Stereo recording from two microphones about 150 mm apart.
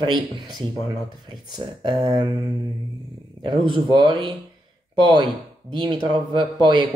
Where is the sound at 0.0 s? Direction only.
30° right (ahead or behind).